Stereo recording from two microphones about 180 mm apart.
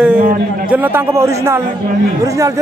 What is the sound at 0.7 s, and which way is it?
Speech, 10° right (ahead or behind).